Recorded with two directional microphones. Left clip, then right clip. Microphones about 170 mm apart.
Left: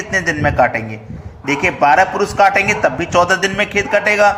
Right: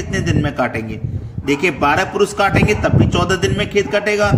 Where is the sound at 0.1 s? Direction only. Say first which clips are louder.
Left 6 dB; 20° right (ahead or behind).